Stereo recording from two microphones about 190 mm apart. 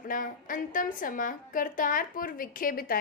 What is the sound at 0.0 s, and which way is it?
A woman's voice, 45° left (ahead or behind).